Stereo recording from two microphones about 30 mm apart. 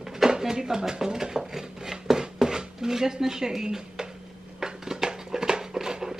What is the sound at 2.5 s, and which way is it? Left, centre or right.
Speech, centre.